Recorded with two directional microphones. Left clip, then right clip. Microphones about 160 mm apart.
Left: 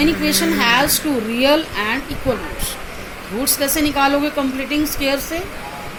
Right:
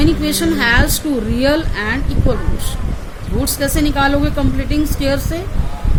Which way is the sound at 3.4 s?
60° right (ahead or behind).